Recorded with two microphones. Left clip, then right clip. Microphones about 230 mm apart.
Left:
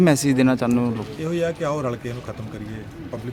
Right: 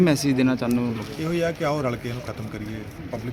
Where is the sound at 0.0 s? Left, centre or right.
Left.